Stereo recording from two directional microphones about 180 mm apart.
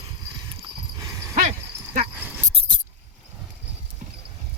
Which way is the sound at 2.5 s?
35° right (ahead or behind).